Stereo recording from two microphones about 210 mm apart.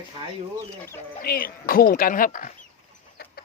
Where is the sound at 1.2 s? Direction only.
45° left (ahead or behind).